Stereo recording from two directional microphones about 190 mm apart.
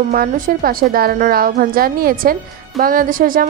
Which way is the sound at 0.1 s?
50° right (ahead or behind).